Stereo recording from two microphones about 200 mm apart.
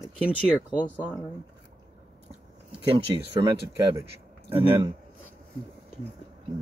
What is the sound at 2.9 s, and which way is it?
Speech, 25° right (ahead or behind).